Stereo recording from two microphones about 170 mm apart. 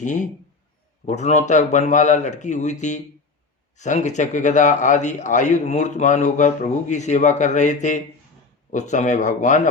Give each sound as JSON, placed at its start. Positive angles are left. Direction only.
{"t": 0.0, "sound": "a man's voice", "side_deg": 45}